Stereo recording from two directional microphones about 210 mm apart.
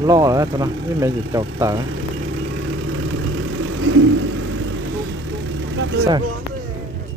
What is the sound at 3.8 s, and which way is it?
Vehicle, 70° right (ahead or behind).